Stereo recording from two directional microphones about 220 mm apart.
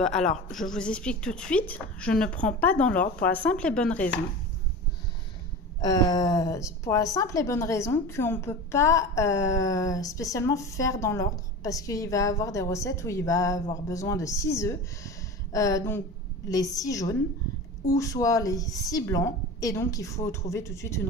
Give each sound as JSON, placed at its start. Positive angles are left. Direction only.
{"t": 0.0, "sound": "a woman's voice", "side_deg": 0}
{"t": 5.8, "sound": "a woman's voice", "side_deg": 15}